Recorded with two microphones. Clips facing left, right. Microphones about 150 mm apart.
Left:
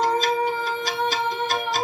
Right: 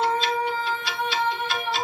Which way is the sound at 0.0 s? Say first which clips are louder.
Left 2 dB; 40° left (ahead or behind).